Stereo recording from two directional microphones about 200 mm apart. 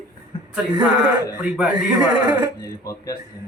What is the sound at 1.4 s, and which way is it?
Speech, 5° right (ahead or behind).